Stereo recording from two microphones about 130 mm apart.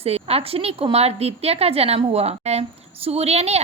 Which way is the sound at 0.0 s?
50° right (ahead or behind).